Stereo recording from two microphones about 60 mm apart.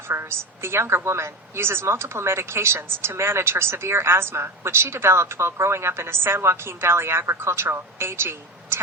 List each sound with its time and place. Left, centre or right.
0.1 s a woman's voice: right